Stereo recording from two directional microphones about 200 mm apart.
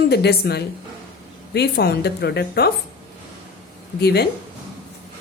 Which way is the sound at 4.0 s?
55° left (ahead or behind).